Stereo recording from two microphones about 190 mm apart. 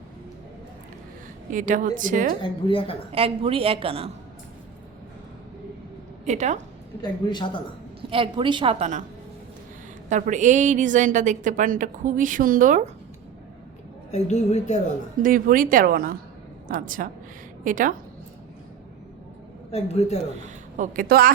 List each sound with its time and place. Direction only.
1.5 s speech: 40° right (ahead or behind)
2.4 s speech: 25° left (ahead or behind)
3.1 s a woman's voice: 30° right (ahead or behind)
6.2 s a woman's voice: 35° right (ahead or behind)
7.0 s speech: 25° left (ahead or behind)
8.1 s a woman's voice: 25° right (ahead or behind)
10.1 s a woman's voice: 40° right (ahead or behind)
14.1 s a woman's voice: 35° left (ahead or behind)
15.2 s a woman's voice: 45° right (ahead or behind)
19.7 s a woman's voice: 35° left (ahead or behind)
20.4 s a woman's voice: 45° right (ahead or behind)